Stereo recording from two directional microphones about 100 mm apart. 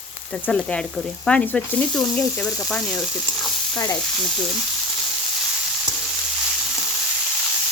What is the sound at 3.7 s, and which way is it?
Frying, 35° left (ahead or behind).